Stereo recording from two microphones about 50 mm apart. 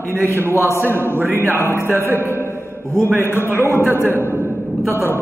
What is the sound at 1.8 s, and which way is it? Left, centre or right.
Speech, right.